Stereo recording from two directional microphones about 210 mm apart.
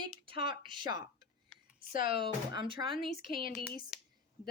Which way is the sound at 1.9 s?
45° left (ahead or behind).